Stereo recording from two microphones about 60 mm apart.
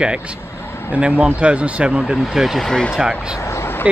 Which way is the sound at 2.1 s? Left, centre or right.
Centre.